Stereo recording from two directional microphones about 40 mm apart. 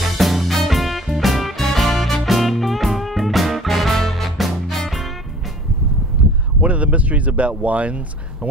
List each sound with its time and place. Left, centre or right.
0.2 s music: centre
6.6 s speech: right